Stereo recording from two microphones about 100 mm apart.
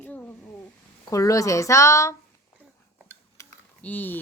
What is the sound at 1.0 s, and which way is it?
Speech, 35° left (ahead or behind).